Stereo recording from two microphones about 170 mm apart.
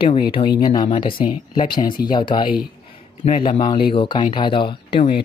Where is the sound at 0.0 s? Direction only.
30° left (ahead or behind).